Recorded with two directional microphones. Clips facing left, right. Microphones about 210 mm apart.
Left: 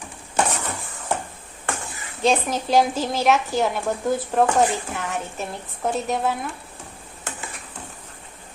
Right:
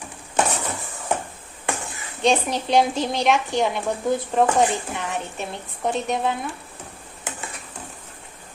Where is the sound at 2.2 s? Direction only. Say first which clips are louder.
Even; centre (ahead or behind).